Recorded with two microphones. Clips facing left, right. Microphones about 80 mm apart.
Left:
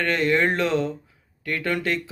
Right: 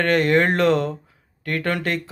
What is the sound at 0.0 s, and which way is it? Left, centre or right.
Speech, right.